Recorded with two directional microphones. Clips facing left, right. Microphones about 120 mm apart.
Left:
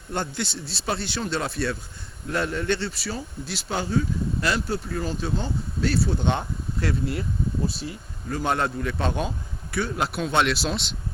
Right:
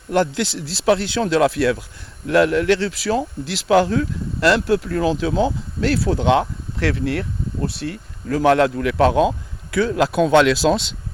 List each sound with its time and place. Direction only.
0.1 s speech: 90° right